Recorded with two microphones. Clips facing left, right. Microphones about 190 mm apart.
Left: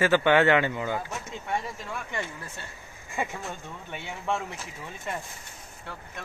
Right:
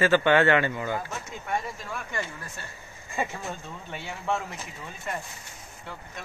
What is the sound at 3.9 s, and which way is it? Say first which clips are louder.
Speech: right 1 dB; 20° left (ahead or behind).